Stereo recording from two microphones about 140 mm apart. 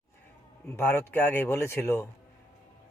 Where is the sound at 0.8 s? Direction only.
15° left (ahead or behind).